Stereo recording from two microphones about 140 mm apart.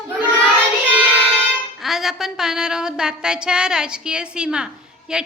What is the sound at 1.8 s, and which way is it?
Music, centre (ahead or behind).